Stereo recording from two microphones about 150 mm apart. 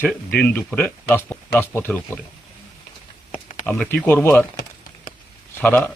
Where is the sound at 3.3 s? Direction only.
45° left (ahead or behind).